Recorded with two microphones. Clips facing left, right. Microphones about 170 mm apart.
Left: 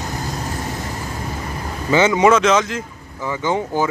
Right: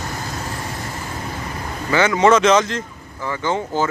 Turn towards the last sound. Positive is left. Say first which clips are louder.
# left 1 dB
turn(degrees=10)  # may be behind; listen again after turning